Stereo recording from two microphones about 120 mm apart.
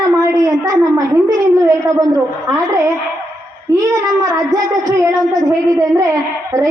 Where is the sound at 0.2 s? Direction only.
25° right (ahead or behind).